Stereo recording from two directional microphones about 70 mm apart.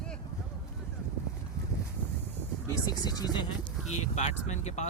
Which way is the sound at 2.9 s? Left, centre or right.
Left.